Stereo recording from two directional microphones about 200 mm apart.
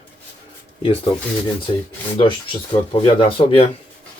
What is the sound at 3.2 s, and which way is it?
Speech, 25° left (ahead or behind).